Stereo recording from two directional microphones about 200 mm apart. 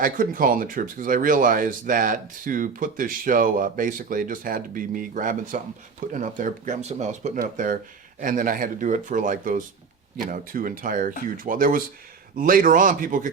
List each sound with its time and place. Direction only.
0.0 s speech: 45° right (ahead or behind)